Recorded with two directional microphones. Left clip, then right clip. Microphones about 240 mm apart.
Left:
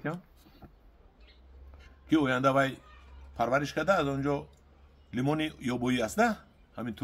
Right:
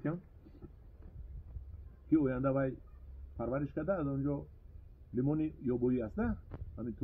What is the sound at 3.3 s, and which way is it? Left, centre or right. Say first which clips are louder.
Speech: left 9 dB; left.